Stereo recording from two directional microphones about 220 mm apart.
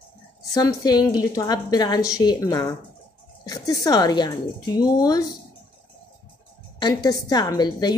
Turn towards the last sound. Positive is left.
turn(degrees=20)  # may be behind; listen again after turning